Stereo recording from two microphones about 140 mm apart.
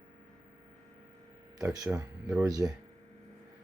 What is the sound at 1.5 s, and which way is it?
Speech, 25° right (ahead or behind).